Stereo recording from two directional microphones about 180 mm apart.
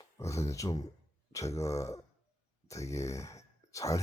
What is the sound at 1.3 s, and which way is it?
Speech, 15° left (ahead or behind).